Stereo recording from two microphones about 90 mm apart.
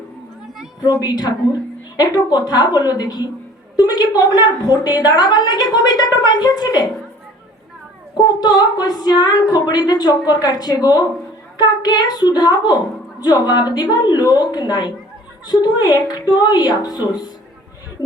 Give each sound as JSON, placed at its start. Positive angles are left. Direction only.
{"t": 0.8, "sound": "a woman's voice", "side_deg": 45}
{"t": 8.1, "sound": "a woman's voice", "side_deg": 50}